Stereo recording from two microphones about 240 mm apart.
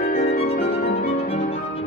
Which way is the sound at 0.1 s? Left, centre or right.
Left.